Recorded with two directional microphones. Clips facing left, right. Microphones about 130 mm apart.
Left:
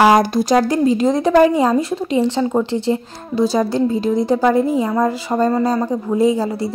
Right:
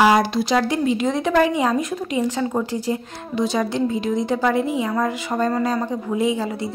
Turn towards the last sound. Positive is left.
turn(degrees=35)  # may be behind; listen again after turning